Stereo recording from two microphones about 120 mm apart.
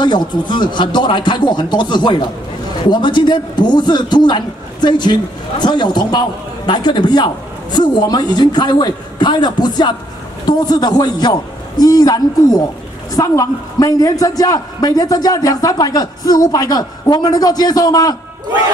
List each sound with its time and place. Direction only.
0.0 s a man's voice: 40° left (ahead or behind)